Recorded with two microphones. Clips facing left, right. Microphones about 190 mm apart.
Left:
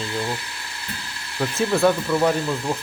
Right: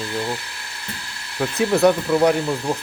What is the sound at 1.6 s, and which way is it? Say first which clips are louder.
Speech: right 3 dB; 15° right (ahead or behind).